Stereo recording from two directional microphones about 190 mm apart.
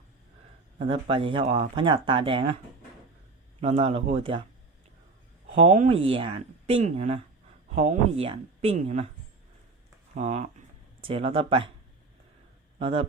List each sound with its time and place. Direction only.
0.8 s speech: 30° right (ahead or behind)
3.6 s speech: 30° right (ahead or behind)
5.5 s speech: 30° right (ahead or behind)
10.2 s speech: 35° right (ahead or behind)
12.8 s speech: 30° right (ahead or behind)